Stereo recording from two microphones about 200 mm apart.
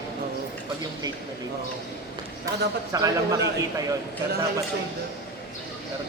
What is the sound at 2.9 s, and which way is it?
Speech, 15° right (ahead or behind).